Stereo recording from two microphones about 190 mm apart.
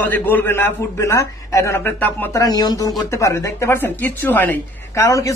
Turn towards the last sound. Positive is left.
turn(degrees=15)  # may be behind; listen again after turning